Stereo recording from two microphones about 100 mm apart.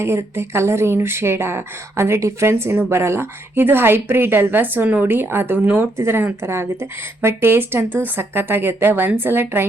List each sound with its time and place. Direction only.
0.0 s speech: 25° right (ahead or behind)